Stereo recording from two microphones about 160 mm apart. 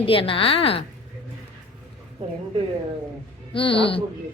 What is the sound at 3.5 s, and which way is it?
Speech, 35° left (ahead or behind).